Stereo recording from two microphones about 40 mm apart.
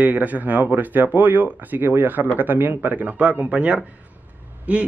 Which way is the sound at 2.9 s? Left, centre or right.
Right.